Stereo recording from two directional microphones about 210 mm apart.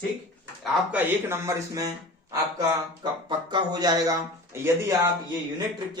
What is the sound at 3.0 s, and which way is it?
Speech, 20° right (ahead or behind).